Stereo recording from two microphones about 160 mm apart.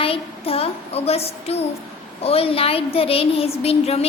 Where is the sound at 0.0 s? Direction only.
35° left (ahead or behind).